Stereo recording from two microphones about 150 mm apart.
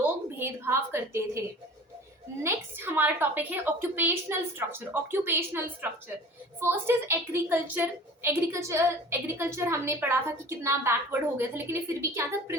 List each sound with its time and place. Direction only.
0.3 s a woman's voice: 15° right (ahead or behind)
2.4 s a woman's voice: 15° right (ahead or behind)